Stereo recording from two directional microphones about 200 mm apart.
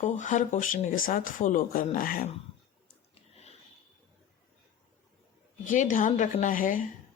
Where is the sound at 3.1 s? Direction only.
30° left (ahead or behind).